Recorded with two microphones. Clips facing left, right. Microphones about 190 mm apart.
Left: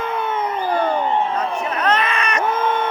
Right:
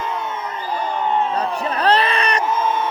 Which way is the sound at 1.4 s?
35° right (ahead or behind).